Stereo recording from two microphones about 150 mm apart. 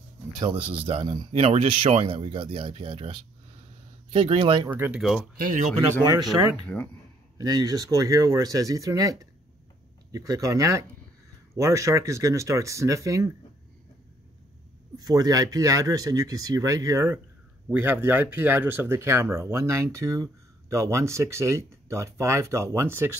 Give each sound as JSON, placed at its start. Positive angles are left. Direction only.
{"t": 0.4, "sound": "speech", "side_deg": -35}
{"t": 4.6, "sound": "speech", "side_deg": -15}
{"t": 5.4, "sound": "speech", "side_deg": -60}
{"t": 6.7, "sound": "speech", "side_deg": 10}
{"t": 7.3, "sound": "speech", "side_deg": -25}
{"t": 15.0, "sound": "speech", "side_deg": -25}